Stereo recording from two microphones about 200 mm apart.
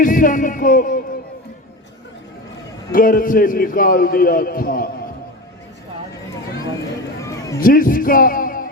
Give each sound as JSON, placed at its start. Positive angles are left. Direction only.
{"t": 0.0, "sound": "speech", "side_deg": 40}
{"t": 2.9, "sound": "a man's voice", "side_deg": 45}
{"t": 7.2, "sound": "a sound", "side_deg": 15}
{"t": 7.6, "sound": "a man's voice", "side_deg": 45}